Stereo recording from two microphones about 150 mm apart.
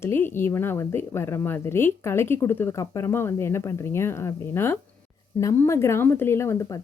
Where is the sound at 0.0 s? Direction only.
15° left (ahead or behind).